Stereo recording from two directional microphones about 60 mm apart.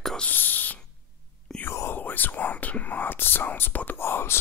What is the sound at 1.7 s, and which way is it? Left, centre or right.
Speech, left.